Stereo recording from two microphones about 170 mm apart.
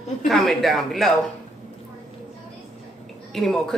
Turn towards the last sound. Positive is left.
turn(degrees=0)  # may be behind; listen again after turning